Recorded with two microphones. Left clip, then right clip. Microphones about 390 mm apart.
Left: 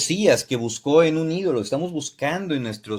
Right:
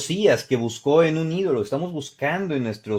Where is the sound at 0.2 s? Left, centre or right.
Right.